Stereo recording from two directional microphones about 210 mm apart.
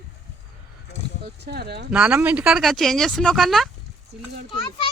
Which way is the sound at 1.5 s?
50° right (ahead or behind).